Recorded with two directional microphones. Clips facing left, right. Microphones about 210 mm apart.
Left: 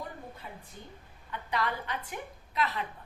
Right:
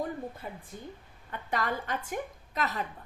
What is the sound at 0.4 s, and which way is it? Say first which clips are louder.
A woman's voice: right 5 dB; 45° right (ahead or behind).